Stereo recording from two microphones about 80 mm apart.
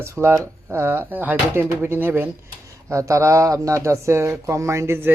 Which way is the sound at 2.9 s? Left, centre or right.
Right.